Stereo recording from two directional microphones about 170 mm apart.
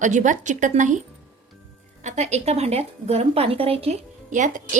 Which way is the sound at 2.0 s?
40° right (ahead or behind).